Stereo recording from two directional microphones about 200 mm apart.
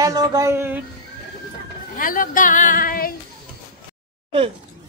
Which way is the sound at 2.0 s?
45° left (ahead or behind).